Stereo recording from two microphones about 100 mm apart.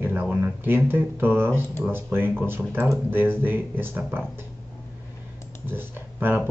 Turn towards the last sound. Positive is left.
turn(degrees=-20)  # may be behind; listen again after turning